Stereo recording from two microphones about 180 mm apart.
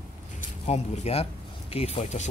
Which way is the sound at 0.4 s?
35° left (ahead or behind).